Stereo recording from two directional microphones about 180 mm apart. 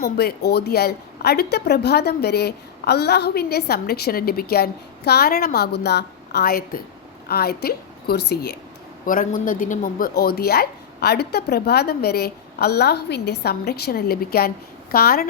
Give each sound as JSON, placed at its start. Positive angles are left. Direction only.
{"t": 0.0, "sound": "a woman's voice", "side_deg": 60}
{"t": 9.0, "sound": "a woman's voice", "side_deg": 50}